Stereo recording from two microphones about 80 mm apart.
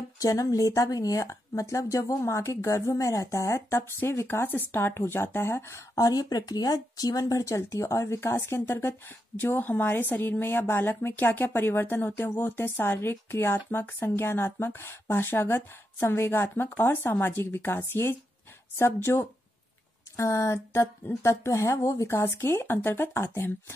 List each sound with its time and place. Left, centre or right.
0.2 s a woman's voice: left
20.2 s a woman's voice: left